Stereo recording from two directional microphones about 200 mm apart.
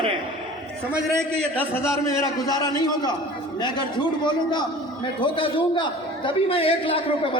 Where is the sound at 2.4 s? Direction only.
20° left (ahead or behind).